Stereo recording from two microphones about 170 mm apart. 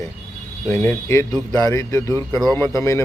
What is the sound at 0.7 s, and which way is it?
A man's voice, 15° left (ahead or behind).